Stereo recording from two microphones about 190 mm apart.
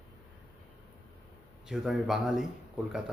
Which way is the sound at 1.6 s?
Centre (ahead or behind).